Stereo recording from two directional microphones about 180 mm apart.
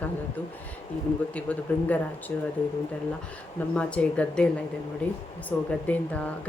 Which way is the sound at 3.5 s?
5° left (ahead or behind).